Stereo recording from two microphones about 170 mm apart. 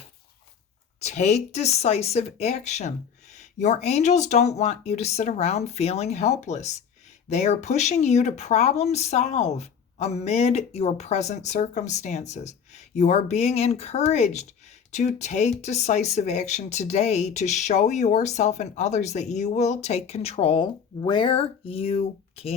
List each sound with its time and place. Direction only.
0.9 s speech: 40° left (ahead or behind)